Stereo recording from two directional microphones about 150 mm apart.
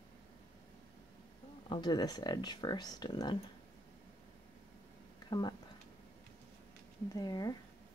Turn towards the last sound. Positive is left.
turn(degrees=25)  # may be behind; listen again after turning